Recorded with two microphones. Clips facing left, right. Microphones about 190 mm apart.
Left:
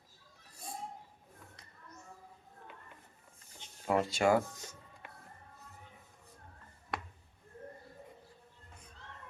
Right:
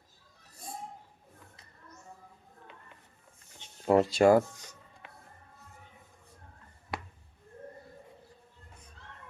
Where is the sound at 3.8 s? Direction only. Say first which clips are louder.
Right 7 dB; 35° right (ahead or behind).